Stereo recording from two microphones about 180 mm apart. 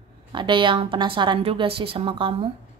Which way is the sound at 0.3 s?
25° right (ahead or behind).